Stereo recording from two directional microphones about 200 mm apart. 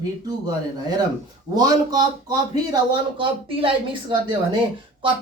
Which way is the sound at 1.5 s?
20° right (ahead or behind).